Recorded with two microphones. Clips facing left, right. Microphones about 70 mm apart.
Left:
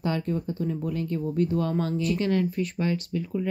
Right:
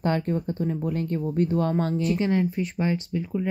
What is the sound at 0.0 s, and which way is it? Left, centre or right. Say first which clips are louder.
Speech: right 3 dB; right.